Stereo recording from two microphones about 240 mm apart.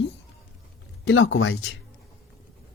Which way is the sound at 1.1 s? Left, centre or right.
Left.